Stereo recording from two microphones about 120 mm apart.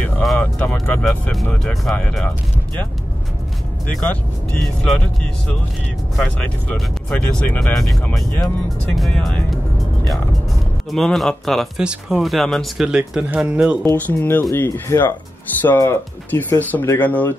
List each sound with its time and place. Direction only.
0.4 s speech: 10° left (ahead or behind)
4.0 s speech: 5° left (ahead or behind)
6.1 s speech: 10° left (ahead or behind)
10.9 s speech: centre (ahead or behind)
13.8 s speech: 15° left (ahead or behind)